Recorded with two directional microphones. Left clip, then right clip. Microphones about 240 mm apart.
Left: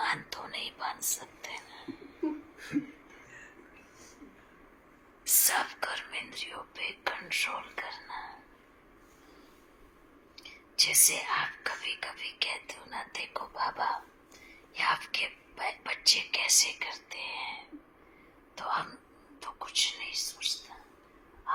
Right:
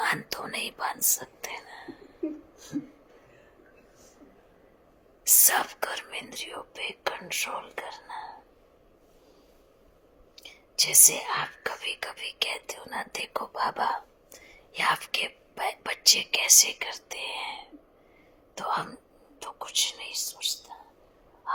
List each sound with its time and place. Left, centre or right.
0.0 s speech: right
5.2 s speech: right
10.3 s speech: right
20.7 s whispering: right